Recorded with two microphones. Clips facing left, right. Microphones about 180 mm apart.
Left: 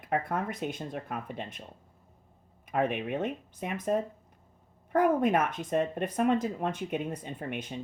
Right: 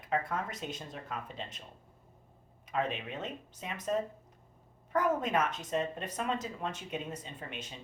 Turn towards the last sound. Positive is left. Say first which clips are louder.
# left 8 dB
turn(degrees=55)  # may be behind; listen again after turning